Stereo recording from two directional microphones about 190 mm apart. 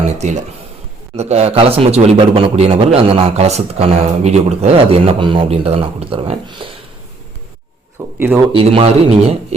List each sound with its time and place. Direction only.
0.2 s a man's voice: 40° right (ahead or behind)
8.2 s speech: 10° right (ahead or behind)
8.5 s a man's voice: 30° right (ahead or behind)